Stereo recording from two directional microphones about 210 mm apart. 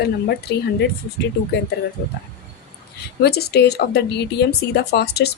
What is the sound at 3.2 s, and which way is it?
Speech, 50° left (ahead or behind).